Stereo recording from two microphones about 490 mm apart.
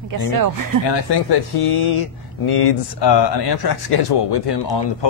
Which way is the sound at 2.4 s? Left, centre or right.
Left.